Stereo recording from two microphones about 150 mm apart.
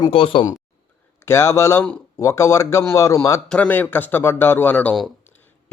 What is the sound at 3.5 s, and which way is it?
Speech, 10° left (ahead or behind).